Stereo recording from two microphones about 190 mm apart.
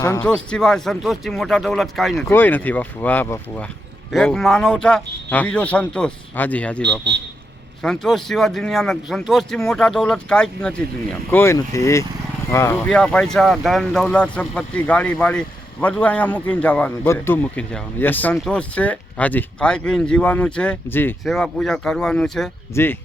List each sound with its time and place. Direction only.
0.0 s speech: 15° left (ahead or behind)
0.3 s speech: 5° left (ahead or behind)
7.1 s a man's voice: 65° right (ahead or behind)
7.8 s speech: centre (ahead or behind)